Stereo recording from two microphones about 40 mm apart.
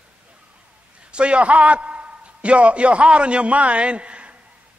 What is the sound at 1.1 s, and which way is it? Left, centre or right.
A man's voice, right.